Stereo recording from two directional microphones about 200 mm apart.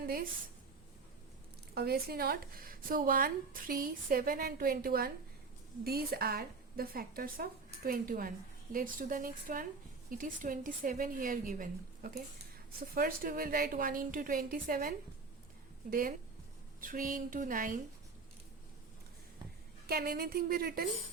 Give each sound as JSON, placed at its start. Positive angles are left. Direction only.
{"t": 0.0, "sound": "a woman's voice", "side_deg": -45}
{"t": 1.7, "sound": "speech", "side_deg": -50}
{"t": 19.9, "sound": "speech", "side_deg": -50}